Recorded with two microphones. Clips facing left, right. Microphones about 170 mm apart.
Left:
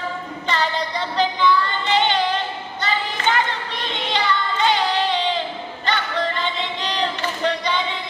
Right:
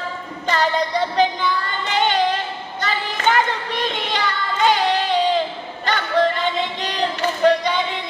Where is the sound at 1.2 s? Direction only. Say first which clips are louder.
Left 4 dB; 45° right (ahead or behind).